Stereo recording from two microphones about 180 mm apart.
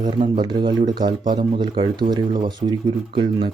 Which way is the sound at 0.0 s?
25° right (ahead or behind).